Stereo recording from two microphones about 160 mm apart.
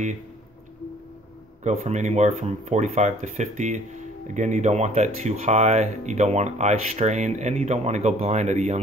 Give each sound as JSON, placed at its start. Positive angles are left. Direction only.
{"t": 1.6, "sound": "speech", "side_deg": -45}